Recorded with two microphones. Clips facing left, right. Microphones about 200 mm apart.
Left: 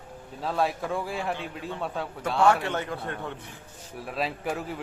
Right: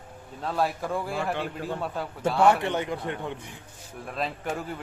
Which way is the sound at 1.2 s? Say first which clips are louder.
Right 2 dB; 60° right (ahead or behind).